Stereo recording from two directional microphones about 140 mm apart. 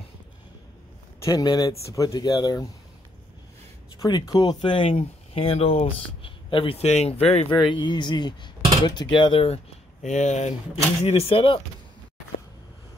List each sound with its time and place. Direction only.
1.2 s speech: 25° left (ahead or behind)
4.0 s speech: 25° left (ahead or behind); by 7.5 s 45° left (ahead or behind)
7.6 s speech: 35° left (ahead or behind)
10.0 s speech: 55° left (ahead or behind)
11.1 s speech: 45° left (ahead or behind)